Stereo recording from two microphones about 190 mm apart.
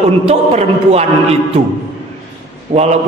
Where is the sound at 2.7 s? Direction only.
35° right (ahead or behind).